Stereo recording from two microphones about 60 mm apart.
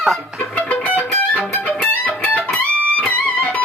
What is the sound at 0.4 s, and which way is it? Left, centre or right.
Music, left.